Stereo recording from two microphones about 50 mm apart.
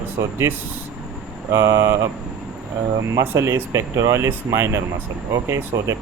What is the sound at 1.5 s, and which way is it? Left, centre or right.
Speech, right.